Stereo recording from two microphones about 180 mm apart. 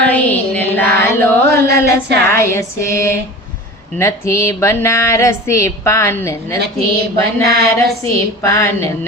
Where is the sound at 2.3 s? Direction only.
15° left (ahead or behind).